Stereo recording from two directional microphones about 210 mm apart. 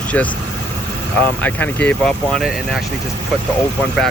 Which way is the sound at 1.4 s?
5° left (ahead or behind).